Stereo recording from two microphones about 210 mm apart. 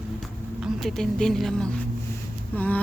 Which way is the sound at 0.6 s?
Centre (ahead or behind).